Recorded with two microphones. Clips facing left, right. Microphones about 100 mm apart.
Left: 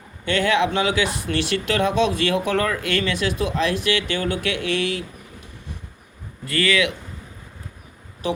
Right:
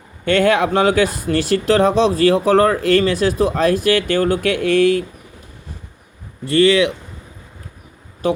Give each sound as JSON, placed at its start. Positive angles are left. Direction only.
{"t": 0.3, "sound": "speech", "side_deg": -45}
{"t": 6.4, "sound": "speech", "side_deg": -30}